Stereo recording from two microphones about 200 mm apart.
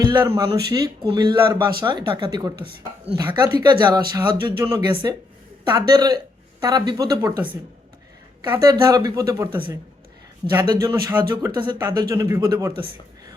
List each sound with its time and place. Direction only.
0.0 s a sound: 20° right (ahead or behind)
0.7 s speech: 20° right (ahead or behind)
10.5 s speech: 20° right (ahead or behind)